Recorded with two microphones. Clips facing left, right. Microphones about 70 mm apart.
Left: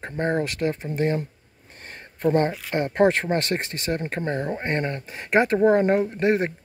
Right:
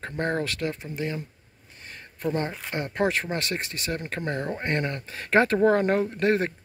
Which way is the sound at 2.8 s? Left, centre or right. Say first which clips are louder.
Left 6 dB; left.